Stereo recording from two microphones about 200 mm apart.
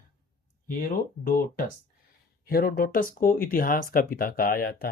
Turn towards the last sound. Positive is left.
turn(degrees=45)  # may be behind; listen again after turning